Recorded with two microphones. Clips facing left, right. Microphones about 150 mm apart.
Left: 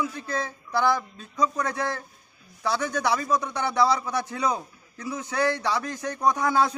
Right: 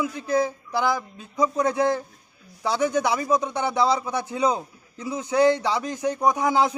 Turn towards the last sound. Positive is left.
turn(degrees=-15)  # may be behind; listen again after turning